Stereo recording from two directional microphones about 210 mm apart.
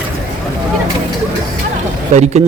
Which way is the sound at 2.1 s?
30° right (ahead or behind).